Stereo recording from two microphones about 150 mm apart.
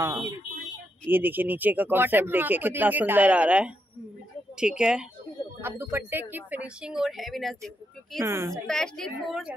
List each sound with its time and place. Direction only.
0.0 s a woman's voice: 15° right (ahead or behind)
5.6 s speech: 15° right (ahead or behind); by 8.2 s centre (ahead or behind)
8.2 s a woman's voice: 20° right (ahead or behind)
8.6 s a woman's voice: 5° left (ahead or behind)